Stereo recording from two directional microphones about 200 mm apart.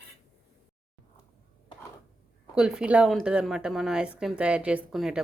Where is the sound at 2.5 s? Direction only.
5° right (ahead or behind).